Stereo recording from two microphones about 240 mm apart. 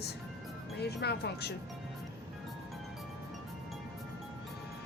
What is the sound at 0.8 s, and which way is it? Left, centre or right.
Speech, left.